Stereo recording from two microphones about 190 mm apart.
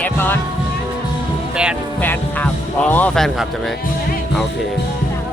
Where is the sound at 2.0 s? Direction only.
10° left (ahead or behind).